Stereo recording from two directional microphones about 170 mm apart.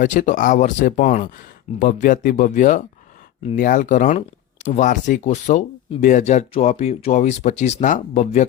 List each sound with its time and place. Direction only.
0.0 s speech: 50° left (ahead or behind)